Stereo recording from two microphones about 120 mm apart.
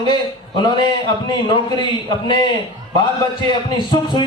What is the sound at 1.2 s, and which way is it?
Speech, 40° left (ahead or behind).